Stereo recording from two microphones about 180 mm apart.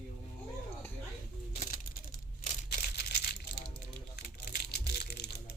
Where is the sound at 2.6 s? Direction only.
65° left (ahead or behind).